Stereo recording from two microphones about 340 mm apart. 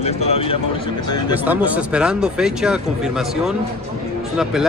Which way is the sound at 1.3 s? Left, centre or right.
Centre.